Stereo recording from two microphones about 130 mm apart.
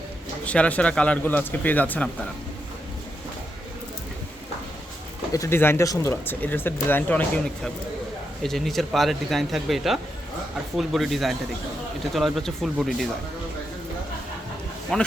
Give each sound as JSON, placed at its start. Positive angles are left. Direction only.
{"t": 0.4, "sound": "speech", "side_deg": 10}
{"t": 5.3, "sound": "speech", "side_deg": 20}
{"t": 14.9, "sound": "speech", "side_deg": 5}